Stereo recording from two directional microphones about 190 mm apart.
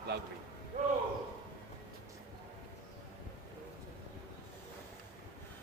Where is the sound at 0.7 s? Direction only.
40° right (ahead or behind).